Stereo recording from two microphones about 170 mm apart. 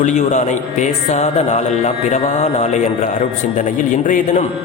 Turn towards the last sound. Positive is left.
turn(degrees=50)  # may be behind; listen again after turning